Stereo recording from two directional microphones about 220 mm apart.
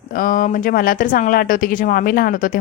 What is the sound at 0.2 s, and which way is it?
A woman's voice, 35° left (ahead or behind).